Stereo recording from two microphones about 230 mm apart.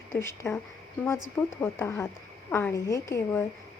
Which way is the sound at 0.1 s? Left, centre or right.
Centre.